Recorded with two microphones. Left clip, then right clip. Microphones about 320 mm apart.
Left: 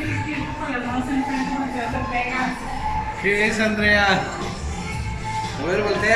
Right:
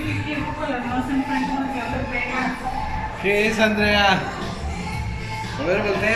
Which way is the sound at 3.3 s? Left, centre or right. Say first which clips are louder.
Right 1 dB; centre.